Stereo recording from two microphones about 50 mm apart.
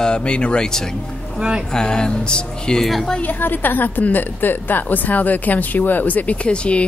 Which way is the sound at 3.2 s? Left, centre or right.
Left.